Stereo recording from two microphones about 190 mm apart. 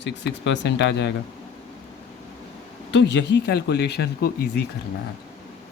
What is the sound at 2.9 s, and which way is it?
Speech, 65° left (ahead or behind).